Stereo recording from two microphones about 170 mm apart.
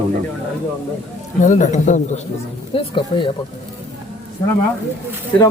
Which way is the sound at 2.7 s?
30° left (ahead or behind).